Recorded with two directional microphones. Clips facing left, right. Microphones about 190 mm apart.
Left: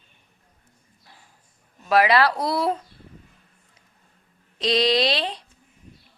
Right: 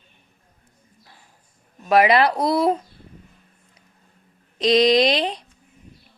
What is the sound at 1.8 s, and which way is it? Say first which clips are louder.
Speech: right 2 dB; 20° right (ahead or behind).